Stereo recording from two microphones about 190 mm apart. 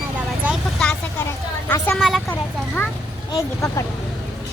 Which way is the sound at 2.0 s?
Centre (ahead or behind).